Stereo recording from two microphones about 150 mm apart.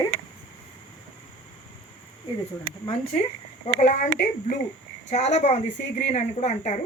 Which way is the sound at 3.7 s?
55° left (ahead or behind).